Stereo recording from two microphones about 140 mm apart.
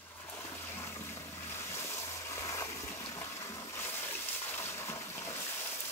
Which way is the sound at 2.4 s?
20° left (ahead or behind).